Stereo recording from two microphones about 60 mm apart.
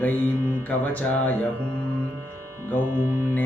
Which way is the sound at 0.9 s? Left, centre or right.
Left.